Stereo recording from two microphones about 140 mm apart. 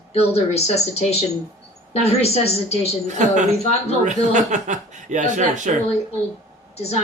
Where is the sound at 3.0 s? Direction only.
60° right (ahead or behind).